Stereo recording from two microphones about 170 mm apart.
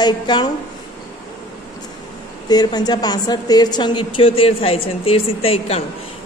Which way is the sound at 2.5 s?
25° left (ahead or behind).